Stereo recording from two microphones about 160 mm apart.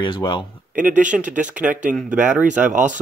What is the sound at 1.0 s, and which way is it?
Speech, 50° right (ahead or behind).